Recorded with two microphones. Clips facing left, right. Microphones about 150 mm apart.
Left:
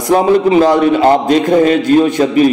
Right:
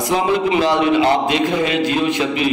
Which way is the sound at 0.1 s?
45° left (ahead or behind).